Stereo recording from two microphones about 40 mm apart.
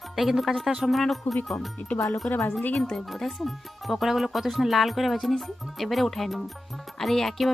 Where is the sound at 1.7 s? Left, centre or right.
Left.